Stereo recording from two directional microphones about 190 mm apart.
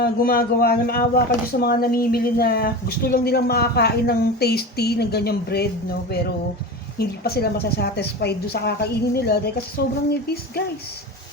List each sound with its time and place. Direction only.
0.0 s speech: 50° left (ahead or behind)